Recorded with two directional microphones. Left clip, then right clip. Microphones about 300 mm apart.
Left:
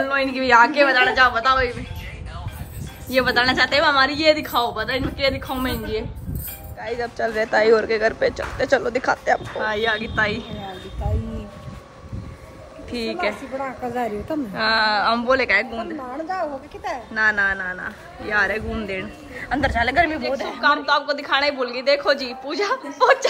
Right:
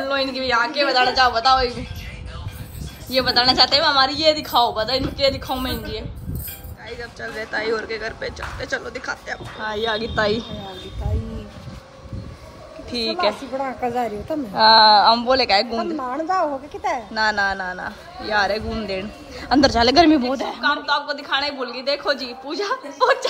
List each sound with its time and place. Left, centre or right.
0.0 s a man's voice: centre
3.1 s a man's voice: centre
9.6 s speech: centre
12.9 s a man's voice: centre
16.3 s a child's voice: right
17.1 s a man's voice: centre